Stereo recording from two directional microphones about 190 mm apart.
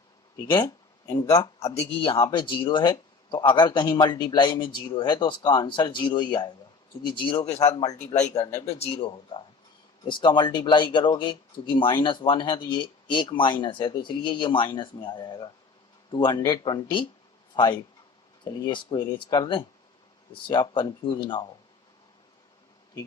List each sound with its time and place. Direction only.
1.0 s speech: 15° left (ahead or behind)
1.5 s speech: 35° left (ahead or behind)
8.5 s speech: 30° left (ahead or behind)